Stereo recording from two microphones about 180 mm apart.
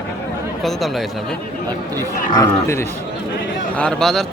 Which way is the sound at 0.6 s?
Centre (ahead or behind).